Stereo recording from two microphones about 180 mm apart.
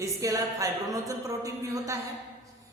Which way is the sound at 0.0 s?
20° right (ahead or behind).